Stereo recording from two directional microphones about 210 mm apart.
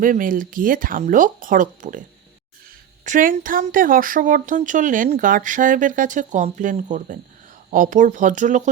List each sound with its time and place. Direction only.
0.0 s speech: 40° right (ahead or behind)